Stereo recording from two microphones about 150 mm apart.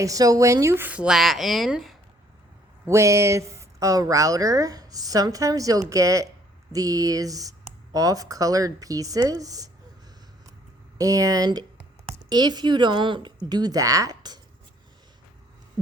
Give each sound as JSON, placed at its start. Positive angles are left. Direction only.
{"t": 0.0, "sound": "speech", "side_deg": -25}
{"t": 2.8, "sound": "speech", "side_deg": -20}
{"t": 10.9, "sound": "speech", "side_deg": -20}